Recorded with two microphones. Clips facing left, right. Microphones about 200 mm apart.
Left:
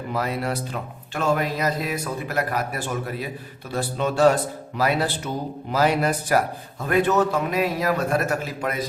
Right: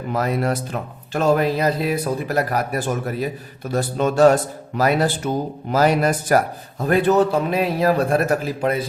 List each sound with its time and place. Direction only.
0.1 s speech: 45° right (ahead or behind)